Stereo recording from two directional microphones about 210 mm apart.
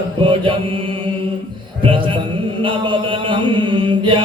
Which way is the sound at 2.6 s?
25° right (ahead or behind).